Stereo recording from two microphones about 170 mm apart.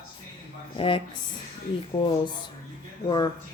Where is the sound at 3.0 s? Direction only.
25° left (ahead or behind).